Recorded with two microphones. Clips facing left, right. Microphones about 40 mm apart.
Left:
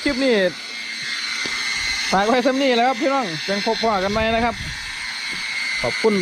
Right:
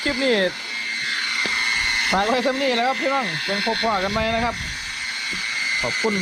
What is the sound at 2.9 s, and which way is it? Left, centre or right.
Speech, centre.